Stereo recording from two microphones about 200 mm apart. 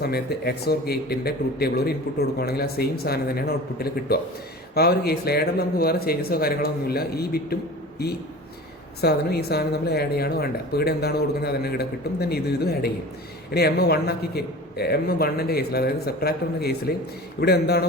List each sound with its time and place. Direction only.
0.0 s a man's voice: 55° left (ahead or behind)
9.0 s a man's voice: 55° left (ahead or behind)